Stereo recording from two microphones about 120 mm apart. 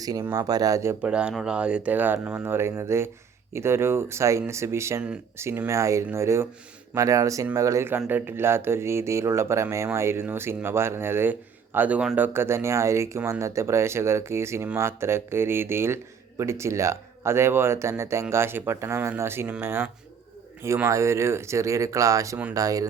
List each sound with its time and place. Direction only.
0.0 s speech: 30° right (ahead or behind)
1.0 s speech: 10° right (ahead or behind); by 22.9 s 30° right (ahead or behind)